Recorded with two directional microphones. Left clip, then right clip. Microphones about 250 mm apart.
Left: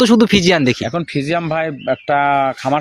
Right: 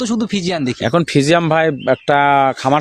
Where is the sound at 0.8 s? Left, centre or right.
Right.